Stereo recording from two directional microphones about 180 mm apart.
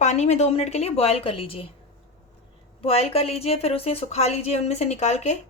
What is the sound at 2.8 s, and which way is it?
A woman's voice, 35° left (ahead or behind).